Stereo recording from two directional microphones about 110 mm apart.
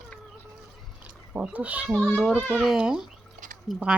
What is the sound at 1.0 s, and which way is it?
A child's voice, 10° right (ahead or behind).